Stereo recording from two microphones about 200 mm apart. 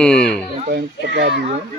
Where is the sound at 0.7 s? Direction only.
55° right (ahead or behind).